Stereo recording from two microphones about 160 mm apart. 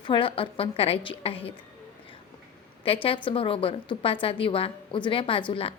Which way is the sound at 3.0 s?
35° left (ahead or behind).